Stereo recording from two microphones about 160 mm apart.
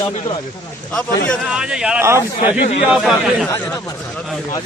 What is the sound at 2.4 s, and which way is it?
Speech, 45° left (ahead or behind).